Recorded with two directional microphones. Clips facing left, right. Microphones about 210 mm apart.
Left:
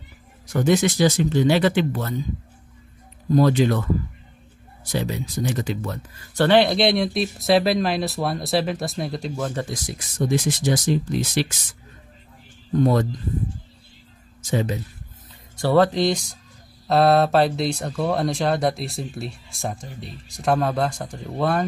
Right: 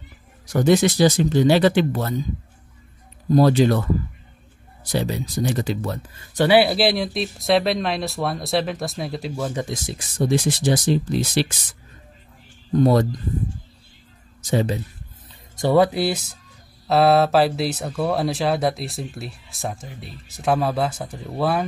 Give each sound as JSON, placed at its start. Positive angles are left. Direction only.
{"t": 0.5, "sound": "speech", "side_deg": -35}
{"t": 3.3, "sound": "speech", "side_deg": -35}
{"t": 4.9, "sound": "speech", "side_deg": -35}
{"t": 6.3, "sound": "speech", "side_deg": -10}
{"t": 9.7, "sound": "speech", "side_deg": -25}
{"t": 14.5, "sound": "speech", "side_deg": -35}
{"t": 15.6, "sound": "speech", "side_deg": -10}